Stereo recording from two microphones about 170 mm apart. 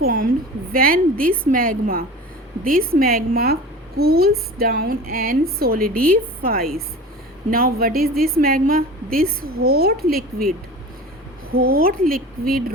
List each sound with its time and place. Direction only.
0.0 s a sound: 55° right (ahead or behind)
0.7 s a woman's voice: 55° right (ahead or behind)
11.5 s a woman's voice: 60° right (ahead or behind)